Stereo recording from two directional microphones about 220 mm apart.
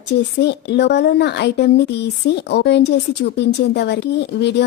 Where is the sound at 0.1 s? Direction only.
50° left (ahead or behind).